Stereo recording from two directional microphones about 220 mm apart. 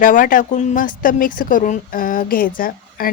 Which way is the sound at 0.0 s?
40° left (ahead or behind).